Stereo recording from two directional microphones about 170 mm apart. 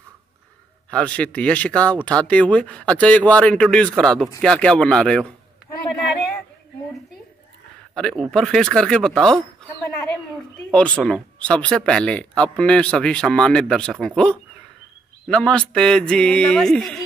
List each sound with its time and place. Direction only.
0.8 s speech: 5° left (ahead or behind)
7.9 s speech: 5° left (ahead or behind)
10.7 s speech: 5° left (ahead or behind)